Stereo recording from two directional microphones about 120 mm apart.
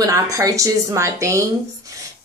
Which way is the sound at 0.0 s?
25° right (ahead or behind).